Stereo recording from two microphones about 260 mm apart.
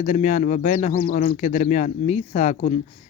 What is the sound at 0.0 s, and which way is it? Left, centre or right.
Speech, left.